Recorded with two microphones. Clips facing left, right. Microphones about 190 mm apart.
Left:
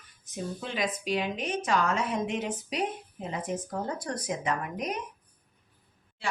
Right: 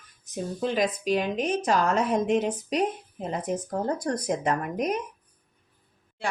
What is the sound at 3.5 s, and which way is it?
Speech, centre (ahead or behind).